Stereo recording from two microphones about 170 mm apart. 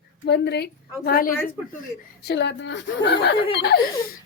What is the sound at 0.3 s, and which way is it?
A woman's voice, 80° left.